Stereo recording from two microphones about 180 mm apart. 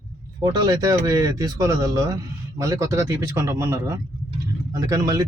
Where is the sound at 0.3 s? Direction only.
20° right (ahead or behind).